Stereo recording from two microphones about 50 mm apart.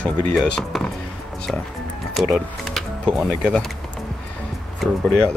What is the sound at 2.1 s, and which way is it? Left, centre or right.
Music, centre.